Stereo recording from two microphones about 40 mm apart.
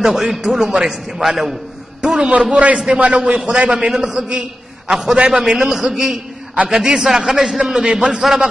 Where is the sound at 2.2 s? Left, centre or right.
Right.